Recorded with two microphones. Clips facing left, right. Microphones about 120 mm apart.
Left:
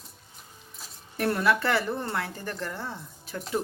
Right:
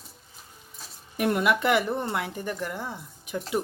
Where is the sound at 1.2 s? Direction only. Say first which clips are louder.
Right 1 dB; 15° right (ahead or behind).